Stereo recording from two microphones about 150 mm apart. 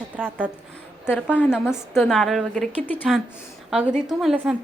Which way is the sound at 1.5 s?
5° right (ahead or behind).